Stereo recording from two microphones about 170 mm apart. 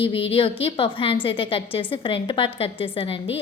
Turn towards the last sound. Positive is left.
turn(degrees=30)  # may be behind; listen again after turning